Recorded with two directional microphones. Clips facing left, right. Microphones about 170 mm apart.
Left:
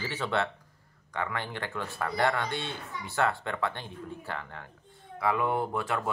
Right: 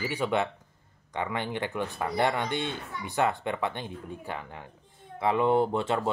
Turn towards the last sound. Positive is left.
turn(degrees=-25)  # may be behind; listen again after turning